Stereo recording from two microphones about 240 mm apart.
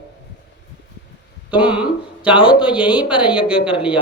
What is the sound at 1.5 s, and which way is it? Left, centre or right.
Speech, centre.